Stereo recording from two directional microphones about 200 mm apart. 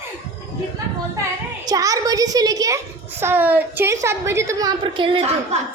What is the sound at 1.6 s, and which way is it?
A child's voice, 15° right (ahead or behind).